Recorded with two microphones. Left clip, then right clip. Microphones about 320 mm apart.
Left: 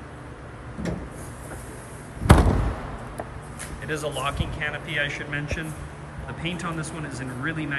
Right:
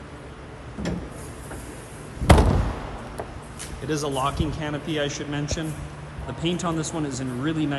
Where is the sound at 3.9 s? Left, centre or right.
Centre.